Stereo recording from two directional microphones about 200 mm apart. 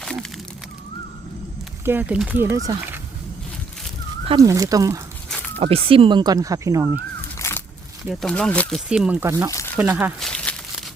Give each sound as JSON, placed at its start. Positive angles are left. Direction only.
{"t": 0.0, "sound": "a sound", "side_deg": 5}
{"t": 1.8, "sound": "speech", "side_deg": -10}
{"t": 4.4, "sound": "speech", "side_deg": -15}
{"t": 5.5, "sound": "speech", "side_deg": -30}
{"t": 7.3, "sound": "a sound", "side_deg": 15}
{"t": 8.0, "sound": "speech", "side_deg": 0}
{"t": 8.9, "sound": "speech", "side_deg": -5}
{"t": 9.5, "sound": "crumpling", "side_deg": 15}
{"t": 9.7, "sound": "speech", "side_deg": -10}
{"t": 10.2, "sound": "crumpling", "side_deg": 5}